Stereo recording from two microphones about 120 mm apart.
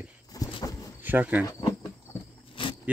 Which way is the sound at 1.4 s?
25° left (ahead or behind).